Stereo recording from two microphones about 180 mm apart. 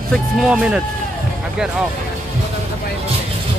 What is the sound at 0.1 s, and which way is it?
Speech, centre (ahead or behind).